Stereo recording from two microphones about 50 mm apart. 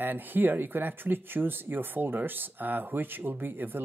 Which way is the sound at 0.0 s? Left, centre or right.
Right.